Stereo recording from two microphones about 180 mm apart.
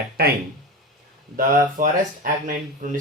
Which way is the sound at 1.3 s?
50° right (ahead or behind).